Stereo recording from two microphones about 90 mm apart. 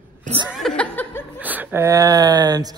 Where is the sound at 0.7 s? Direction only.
20° left (ahead or behind).